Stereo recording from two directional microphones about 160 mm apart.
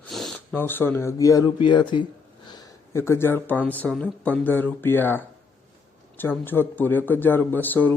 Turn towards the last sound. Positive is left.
turn(degrees=10)  # may be behind; listen again after turning